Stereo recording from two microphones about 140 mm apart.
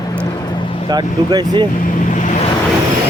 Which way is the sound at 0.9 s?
30° right (ahead or behind).